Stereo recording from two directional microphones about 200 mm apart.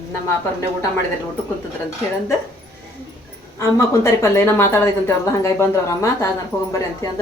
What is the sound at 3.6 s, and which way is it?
A woman's voice, 15° left (ahead or behind).